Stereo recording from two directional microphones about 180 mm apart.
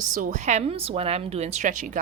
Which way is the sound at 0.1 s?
45° right (ahead or behind).